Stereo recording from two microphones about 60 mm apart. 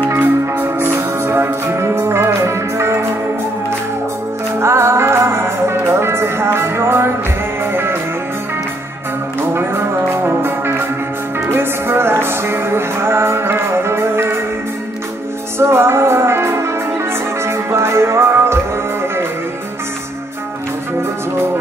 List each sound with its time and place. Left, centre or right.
0.1 s music: right
4.6 s music: right
9.5 s music: right
15.6 s music: right
17.6 s music: right